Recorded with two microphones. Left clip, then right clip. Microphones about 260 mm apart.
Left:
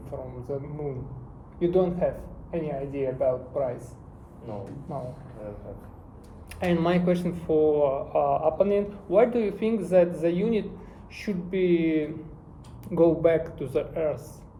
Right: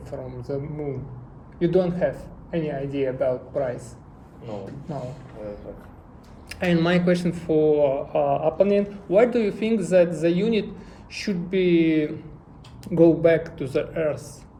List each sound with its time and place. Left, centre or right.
0.0 s speech: right
6.5 s speech: right